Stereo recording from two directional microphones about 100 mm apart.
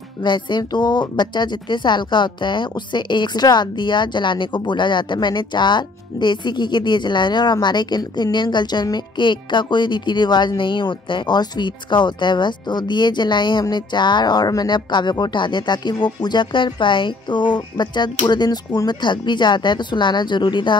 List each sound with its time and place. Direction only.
0.2 s speech: 50° left (ahead or behind)